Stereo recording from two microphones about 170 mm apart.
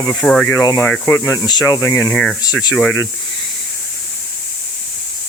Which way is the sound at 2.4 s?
20° left (ahead or behind).